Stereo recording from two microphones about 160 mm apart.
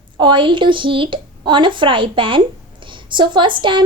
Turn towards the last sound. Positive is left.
turn(degrees=-30)  # may be behind; listen again after turning